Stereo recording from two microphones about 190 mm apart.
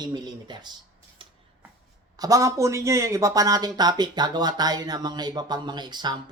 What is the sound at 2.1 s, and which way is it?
Speech, 20° right (ahead or behind).